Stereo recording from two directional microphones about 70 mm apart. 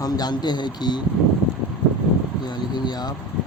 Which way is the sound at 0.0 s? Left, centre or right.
Left.